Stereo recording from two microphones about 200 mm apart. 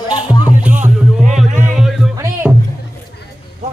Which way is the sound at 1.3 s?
35° right (ahead or behind).